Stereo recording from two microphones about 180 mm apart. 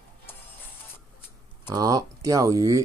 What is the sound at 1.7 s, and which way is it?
Speech, 20° right (ahead or behind).